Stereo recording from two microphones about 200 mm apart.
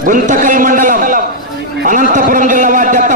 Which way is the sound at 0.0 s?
40° right (ahead or behind).